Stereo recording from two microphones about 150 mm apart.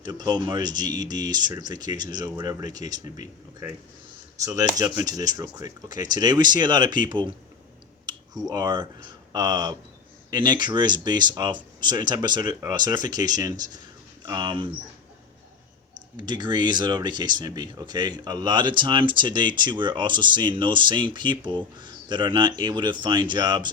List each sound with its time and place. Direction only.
0.0 s speech: 25° right (ahead or behind)
16.1 s speech: 30° right (ahead or behind)